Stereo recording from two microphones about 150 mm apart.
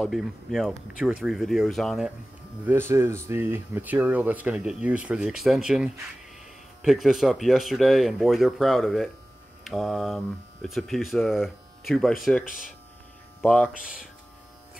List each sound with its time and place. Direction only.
0.0 s speech: centre (ahead or behind)
2.6 s speech: 15° right (ahead or behind); by 12.2 s centre (ahead or behind)
12.4 s speech: 65° left (ahead or behind)
13.4 s speech: 10° left (ahead or behind)